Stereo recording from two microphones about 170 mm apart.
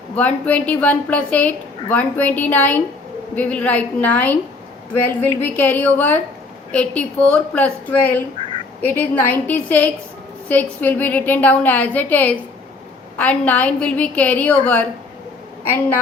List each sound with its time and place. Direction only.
0.2 s a woman's voice: 10° left (ahead or behind)
5.4 s a woman's voice: 10° left (ahead or behind)